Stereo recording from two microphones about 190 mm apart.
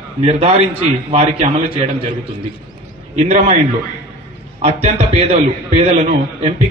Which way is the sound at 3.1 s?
35° right (ahead or behind).